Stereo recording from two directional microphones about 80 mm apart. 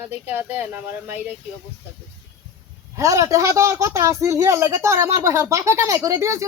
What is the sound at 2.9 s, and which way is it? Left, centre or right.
A woman's voice, right.